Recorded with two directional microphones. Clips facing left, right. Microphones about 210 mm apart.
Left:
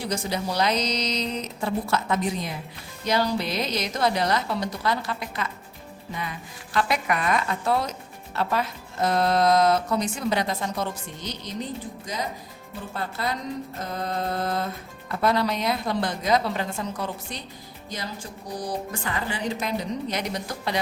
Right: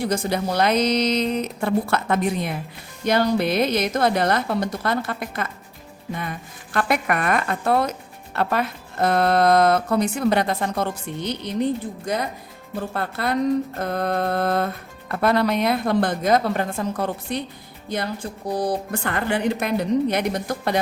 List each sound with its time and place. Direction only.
0.0 s a woman's voice: 55° right (ahead or behind)
6.7 s speech: 55° right (ahead or behind)